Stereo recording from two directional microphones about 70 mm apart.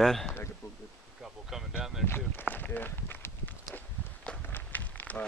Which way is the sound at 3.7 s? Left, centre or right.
Centre.